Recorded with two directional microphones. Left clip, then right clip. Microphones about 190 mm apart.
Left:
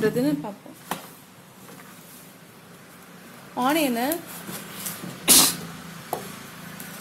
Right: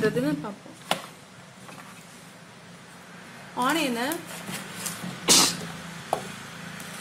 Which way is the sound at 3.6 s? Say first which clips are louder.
Left 2 dB; 25° left (ahead or behind).